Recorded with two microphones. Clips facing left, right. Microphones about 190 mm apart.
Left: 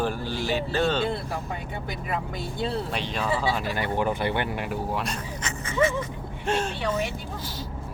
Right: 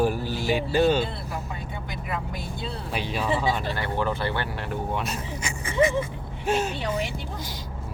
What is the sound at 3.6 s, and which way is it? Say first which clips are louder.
Speech: left 1 dB; 15° left (ahead or behind).